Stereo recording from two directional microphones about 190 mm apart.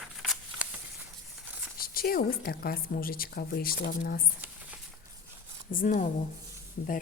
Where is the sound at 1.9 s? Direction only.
50° left (ahead or behind).